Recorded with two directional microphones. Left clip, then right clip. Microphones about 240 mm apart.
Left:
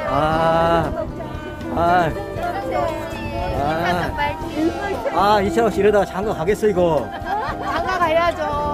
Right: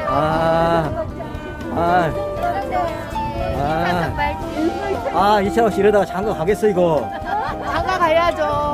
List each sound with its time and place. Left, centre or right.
0.2 s mantra: centre
1.8 s music: centre
3.5 s music: centre
5.1 s speech: centre
7.7 s music: right